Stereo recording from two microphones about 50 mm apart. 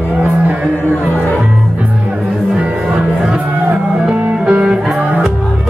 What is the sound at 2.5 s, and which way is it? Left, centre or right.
Music, centre.